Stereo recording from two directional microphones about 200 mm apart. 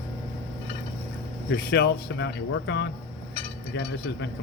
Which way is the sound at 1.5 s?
55° left (ahead or behind).